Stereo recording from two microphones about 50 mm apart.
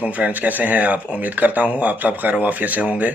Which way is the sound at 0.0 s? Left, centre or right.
Right.